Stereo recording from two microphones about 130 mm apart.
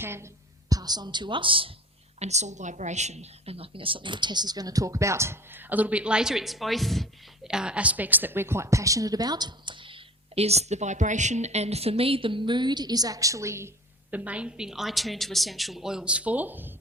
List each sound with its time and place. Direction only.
0.0 s a woman's voice: 20° right (ahead or behind)
0.7 s a woman's voice: 30° right (ahead or behind)
2.1 s a woman's voice: 60° right (ahead or behind); by 13.7 s 20° right (ahead or behind)
14.1 s a woman's voice: 10° right (ahead or behind)